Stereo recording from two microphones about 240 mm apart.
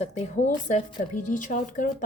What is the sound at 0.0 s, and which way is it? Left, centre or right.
Speech, left.